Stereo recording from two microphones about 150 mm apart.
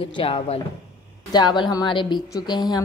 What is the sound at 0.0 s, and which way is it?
A woman's voice, 35° left (ahead or behind).